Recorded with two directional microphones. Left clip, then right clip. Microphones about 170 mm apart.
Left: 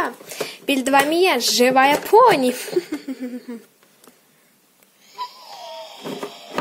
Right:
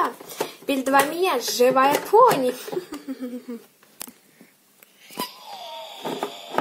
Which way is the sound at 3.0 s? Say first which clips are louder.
Left 2 dB; 30° left (ahead or behind).